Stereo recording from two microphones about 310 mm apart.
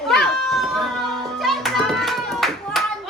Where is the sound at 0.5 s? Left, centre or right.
Centre.